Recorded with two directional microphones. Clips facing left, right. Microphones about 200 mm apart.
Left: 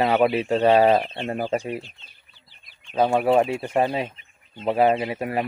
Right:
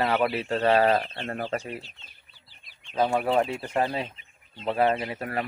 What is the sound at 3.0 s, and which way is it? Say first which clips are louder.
Speech: left 6 dB; 35° left (ahead or behind).